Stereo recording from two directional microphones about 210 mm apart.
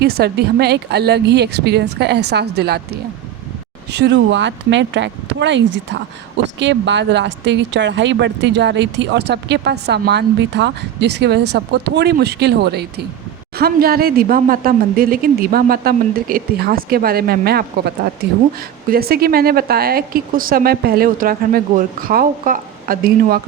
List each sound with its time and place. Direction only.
0.0 s speech: 50° right (ahead or behind)